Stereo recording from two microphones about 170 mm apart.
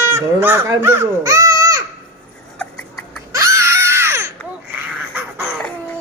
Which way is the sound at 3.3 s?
20° right (ahead or behind).